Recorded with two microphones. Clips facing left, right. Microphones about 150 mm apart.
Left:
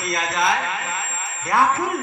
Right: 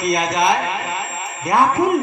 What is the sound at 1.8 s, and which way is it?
Speech, 15° right (ahead or behind).